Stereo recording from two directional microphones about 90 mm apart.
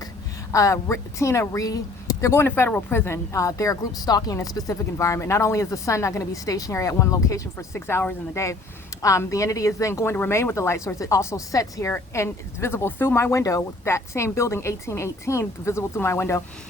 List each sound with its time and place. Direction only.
0.5 s speech: 35° left (ahead or behind)